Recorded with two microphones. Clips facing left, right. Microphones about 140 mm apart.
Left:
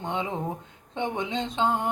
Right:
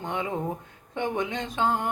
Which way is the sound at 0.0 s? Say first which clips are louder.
Even; 20° left (ahead or behind).